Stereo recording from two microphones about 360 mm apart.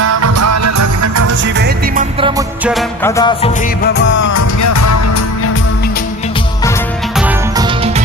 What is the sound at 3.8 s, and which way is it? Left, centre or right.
Music, left.